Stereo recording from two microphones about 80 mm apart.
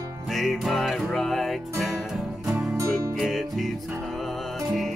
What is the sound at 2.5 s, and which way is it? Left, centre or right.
Music, right.